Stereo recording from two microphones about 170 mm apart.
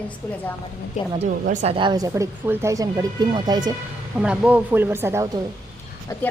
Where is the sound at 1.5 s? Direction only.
45° right (ahead or behind).